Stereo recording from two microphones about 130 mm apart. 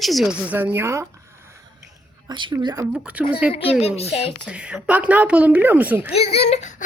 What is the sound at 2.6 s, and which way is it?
Speech, 30° right (ahead or behind).